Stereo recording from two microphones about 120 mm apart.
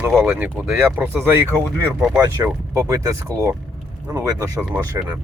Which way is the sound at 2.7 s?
30° right (ahead or behind).